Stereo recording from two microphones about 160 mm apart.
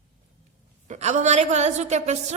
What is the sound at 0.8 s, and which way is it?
A woman's voice, 45° right (ahead or behind).